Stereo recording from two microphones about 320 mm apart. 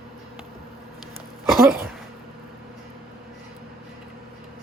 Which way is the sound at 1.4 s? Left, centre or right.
Centre.